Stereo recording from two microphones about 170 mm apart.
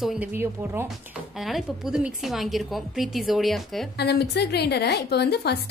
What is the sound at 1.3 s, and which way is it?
A woman's voice, centre (ahead or behind).